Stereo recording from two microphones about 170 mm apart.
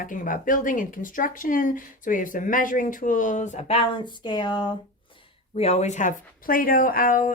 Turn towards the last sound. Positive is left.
turn(degrees=55)  # may be behind; listen again after turning